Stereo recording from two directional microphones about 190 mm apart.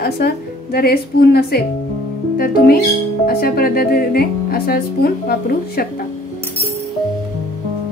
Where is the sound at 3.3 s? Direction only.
55° left (ahead or behind).